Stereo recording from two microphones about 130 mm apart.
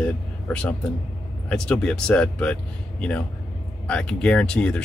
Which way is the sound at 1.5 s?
5° left (ahead or behind).